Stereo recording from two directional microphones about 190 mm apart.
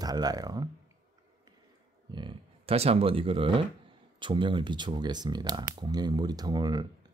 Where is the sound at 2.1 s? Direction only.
25° right (ahead or behind).